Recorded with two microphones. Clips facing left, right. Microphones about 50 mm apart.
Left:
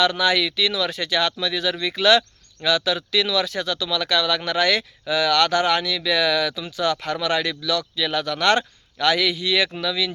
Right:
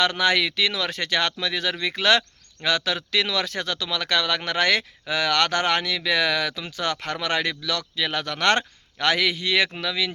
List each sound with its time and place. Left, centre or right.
0.0 s speech: right